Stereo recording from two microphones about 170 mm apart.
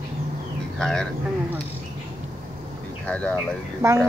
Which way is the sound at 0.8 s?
5° left (ahead or behind).